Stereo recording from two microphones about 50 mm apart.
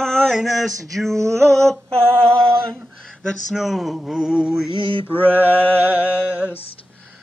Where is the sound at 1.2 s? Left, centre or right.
Right.